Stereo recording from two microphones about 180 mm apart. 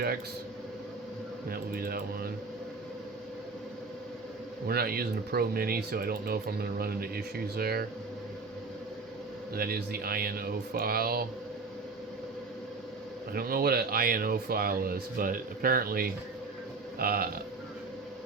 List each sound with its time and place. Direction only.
1.5 s speech: 55° right (ahead or behind)
4.6 s speech: 55° right (ahead or behind)
9.6 s speech: 55° right (ahead or behind)
13.3 s speech: 55° right (ahead or behind)